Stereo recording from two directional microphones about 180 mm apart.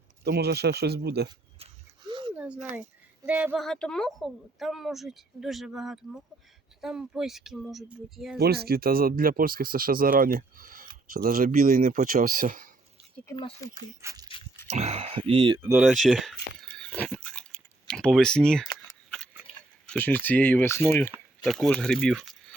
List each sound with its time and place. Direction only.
0.3 s speech: 65° right (ahead or behind)
1.5 s a sound: 30° right (ahead or behind)
2.3 s a sound: 5° right (ahead or behind)
3.2 s a woman's voice: 10° right (ahead or behind)
8.4 s speech: 60° right (ahead or behind)
13.4 s speech: 20° left (ahead or behind)
14.0 s speech: 20° right (ahead or behind)
14.7 s speech: 40° right (ahead or behind)
15.5 s speech: 15° right (ahead or behind)
15.8 s a sound: centre (ahead or behind)
19.9 s speech: 10° left (ahead or behind)